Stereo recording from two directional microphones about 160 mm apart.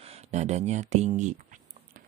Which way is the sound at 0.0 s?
40° right (ahead or behind).